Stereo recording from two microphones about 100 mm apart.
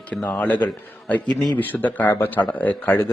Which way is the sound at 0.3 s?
15° left (ahead or behind).